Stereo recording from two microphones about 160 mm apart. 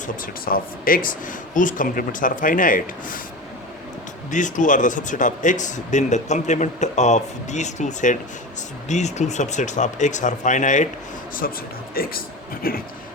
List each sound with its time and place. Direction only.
0.4 s speech: 65° left (ahead or behind)
4.3 s speech: 50° left (ahead or behind)
11.4 s a man's voice: 70° left (ahead or behind)